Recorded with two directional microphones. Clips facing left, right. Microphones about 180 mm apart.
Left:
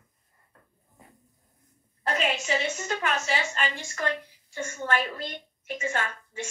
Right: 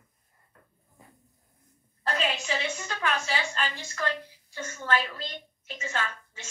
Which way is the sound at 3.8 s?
10° left (ahead or behind).